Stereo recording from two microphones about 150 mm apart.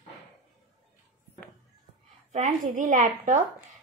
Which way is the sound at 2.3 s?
55° right (ahead or behind).